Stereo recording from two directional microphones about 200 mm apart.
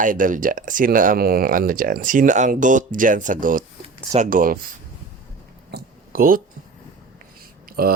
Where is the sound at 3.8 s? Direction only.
30° right (ahead or behind).